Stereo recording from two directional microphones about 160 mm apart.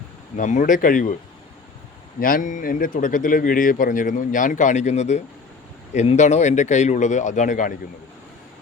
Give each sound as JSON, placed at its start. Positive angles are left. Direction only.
{"t": 0.3, "sound": "speech", "side_deg": 50}
{"t": 2.2, "sound": "speech", "side_deg": 55}